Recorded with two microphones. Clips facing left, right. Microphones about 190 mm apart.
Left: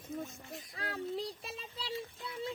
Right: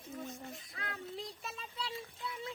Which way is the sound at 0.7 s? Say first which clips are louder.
Left 6 dB; 35° left (ahead or behind).